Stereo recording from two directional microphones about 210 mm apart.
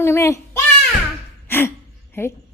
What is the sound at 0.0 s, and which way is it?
Speech, 10° left (ahead or behind).